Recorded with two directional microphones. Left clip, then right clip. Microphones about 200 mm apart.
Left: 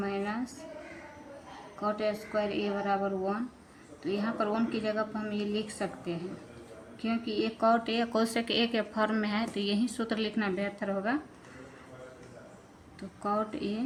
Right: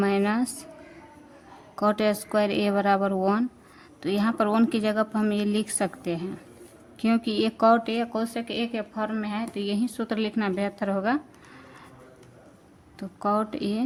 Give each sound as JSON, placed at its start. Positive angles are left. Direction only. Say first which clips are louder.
{"t": 0.0, "sound": "a woman's voice", "louder": "right 9 dB", "side_deg": -50}
{"t": 1.8, "sound": "a woman's voice", "louder": "right 8 dB", "side_deg": -50}
{"t": 13.0, "sound": "a woman's voice", "louder": "right 6 dB", "side_deg": -30}